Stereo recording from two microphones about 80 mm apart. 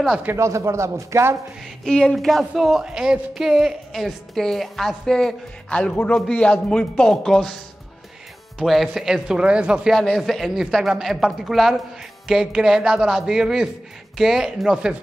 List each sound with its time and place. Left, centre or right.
0.4 s a man's voice: right
1.9 s speech: centre
8.5 s speech: centre
9.9 s speech: centre